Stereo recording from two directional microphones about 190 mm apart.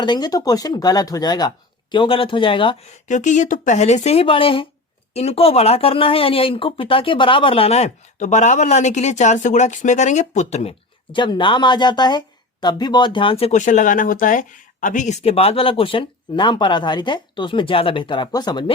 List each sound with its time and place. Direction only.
0.0 s speech: 20° left (ahead or behind)
3.1 s speech: 40° left (ahead or behind); by 18.6 s 20° left (ahead or behind)